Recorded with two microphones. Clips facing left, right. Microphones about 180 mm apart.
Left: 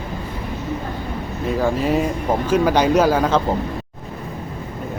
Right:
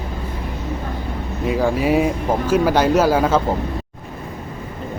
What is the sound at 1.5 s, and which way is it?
Speech, 10° right (ahead or behind).